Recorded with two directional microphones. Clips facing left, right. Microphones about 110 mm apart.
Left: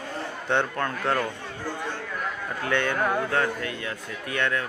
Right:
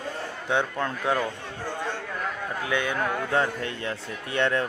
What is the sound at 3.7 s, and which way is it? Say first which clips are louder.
Speech: right 1 dB; 30° right (ahead or behind).